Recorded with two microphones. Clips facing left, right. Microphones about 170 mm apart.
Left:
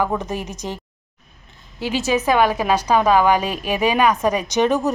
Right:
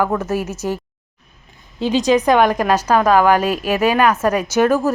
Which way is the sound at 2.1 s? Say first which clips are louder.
Right 3 dB; 5° left (ahead or behind).